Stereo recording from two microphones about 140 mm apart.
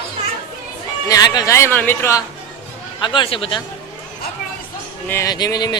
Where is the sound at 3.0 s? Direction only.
35° left (ahead or behind).